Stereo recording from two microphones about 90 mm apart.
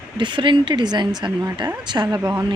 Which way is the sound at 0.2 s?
60° right (ahead or behind).